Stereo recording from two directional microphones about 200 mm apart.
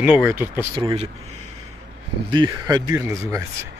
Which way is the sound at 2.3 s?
20° right (ahead or behind).